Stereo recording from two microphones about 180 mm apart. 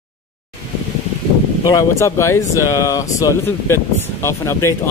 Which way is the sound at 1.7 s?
15° left (ahead or behind).